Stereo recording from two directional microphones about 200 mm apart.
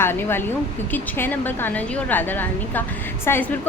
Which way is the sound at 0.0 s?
10° left (ahead or behind).